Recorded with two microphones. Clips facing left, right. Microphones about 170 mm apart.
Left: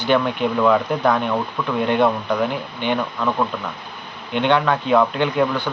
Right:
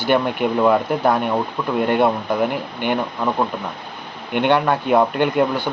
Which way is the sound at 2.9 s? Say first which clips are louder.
Even; 25° right (ahead or behind).